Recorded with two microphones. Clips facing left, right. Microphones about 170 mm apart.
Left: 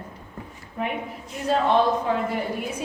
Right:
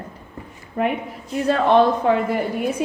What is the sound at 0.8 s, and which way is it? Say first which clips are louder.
A woman's voice: right 6 dB; 60° right (ahead or behind).